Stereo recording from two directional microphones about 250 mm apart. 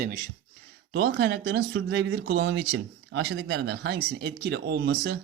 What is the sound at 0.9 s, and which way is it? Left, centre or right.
Speech, right.